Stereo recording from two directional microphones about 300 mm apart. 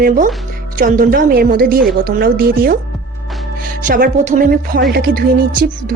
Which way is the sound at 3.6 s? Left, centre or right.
Right.